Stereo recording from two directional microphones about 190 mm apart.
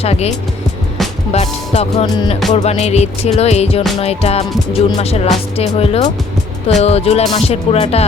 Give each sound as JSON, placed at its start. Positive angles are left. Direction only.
{"t": 0.0, "sound": "music", "side_deg": 35}